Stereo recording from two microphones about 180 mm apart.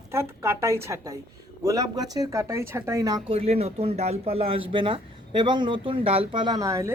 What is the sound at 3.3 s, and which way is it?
A woman's voice, 35° right (ahead or behind).